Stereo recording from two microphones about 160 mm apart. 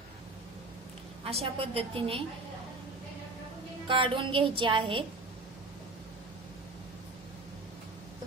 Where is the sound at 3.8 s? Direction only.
30° right (ahead or behind).